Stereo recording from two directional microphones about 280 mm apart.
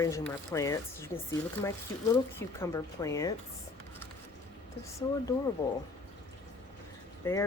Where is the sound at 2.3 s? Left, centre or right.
Centre.